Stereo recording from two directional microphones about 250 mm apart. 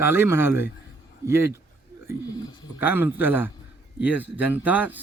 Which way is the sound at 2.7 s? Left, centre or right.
Centre.